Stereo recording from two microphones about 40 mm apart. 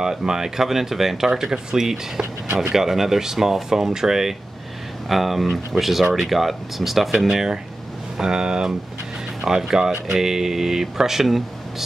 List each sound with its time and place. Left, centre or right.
0.0 s speech: centre